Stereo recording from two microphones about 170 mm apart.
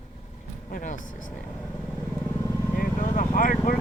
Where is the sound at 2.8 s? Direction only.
50° left (ahead or behind).